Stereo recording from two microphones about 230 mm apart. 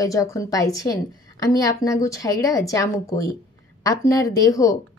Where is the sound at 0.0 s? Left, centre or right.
Centre.